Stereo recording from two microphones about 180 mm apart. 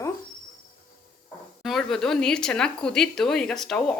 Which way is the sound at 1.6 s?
Centre (ahead or behind).